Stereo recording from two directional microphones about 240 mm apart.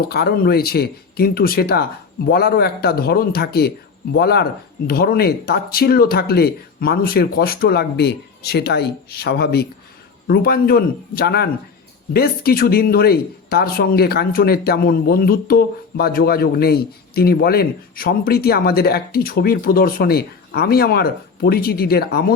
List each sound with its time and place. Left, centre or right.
0.1 s speech: left